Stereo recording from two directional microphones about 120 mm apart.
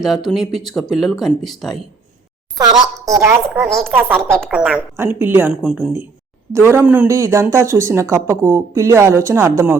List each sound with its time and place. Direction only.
0.0 s speech: centre (ahead or behind)
2.6 s a woman's voice: 30° right (ahead or behind)
3.2 s a woman's voice: 15° right (ahead or behind)
3.7 s a woman's voice: centre (ahead or behind); by 5.5 s 15° right (ahead or behind)
5.6 s speech: 5° right (ahead or behind)
6.5 s a woman's voice: 20° right (ahead or behind)